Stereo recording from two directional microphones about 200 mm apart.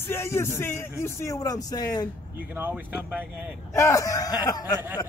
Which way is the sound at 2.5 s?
10° right (ahead or behind).